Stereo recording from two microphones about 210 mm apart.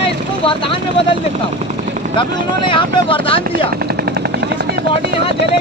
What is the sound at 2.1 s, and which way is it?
Speech, 25° left (ahead or behind).